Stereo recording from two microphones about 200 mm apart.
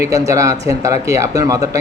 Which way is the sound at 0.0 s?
15° right (ahead or behind).